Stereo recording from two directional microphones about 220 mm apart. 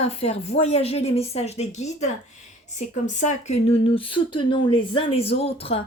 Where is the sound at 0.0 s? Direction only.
30° left (ahead or behind).